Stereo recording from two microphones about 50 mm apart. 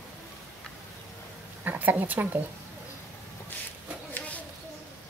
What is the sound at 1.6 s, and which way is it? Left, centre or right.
Speech, right.